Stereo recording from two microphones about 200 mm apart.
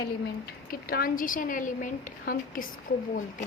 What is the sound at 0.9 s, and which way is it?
A woman's voice, 45° left (ahead or behind).